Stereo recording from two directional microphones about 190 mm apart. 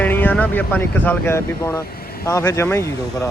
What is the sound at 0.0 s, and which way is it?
Speech, 10° left (ahead or behind).